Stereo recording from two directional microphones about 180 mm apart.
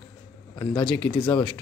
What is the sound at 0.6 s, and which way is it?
Speech, 25° left (ahead or behind).